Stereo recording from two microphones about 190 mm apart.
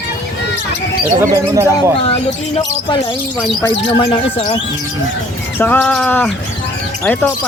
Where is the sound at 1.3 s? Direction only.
15° right (ahead or behind).